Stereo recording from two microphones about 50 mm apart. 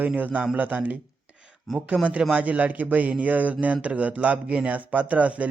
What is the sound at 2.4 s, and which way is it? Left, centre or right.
Speech, right.